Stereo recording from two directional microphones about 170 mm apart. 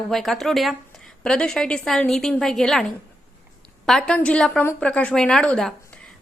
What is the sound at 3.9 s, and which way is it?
A woman's voice, 5° left (ahead or behind).